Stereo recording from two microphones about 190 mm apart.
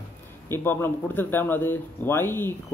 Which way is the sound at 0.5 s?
10° left (ahead or behind).